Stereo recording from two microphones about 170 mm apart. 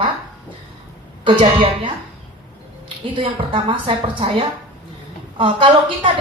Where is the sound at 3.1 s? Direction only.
30° right (ahead or behind).